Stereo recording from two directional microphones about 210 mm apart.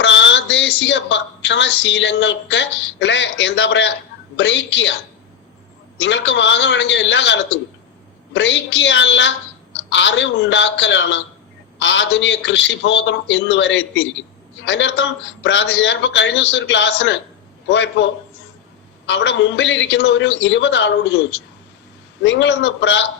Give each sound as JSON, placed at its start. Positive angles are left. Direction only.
{"t": 0.0, "sound": "a woman's voice", "side_deg": 60}
{"t": 6.0, "sound": "a man's voice", "side_deg": 60}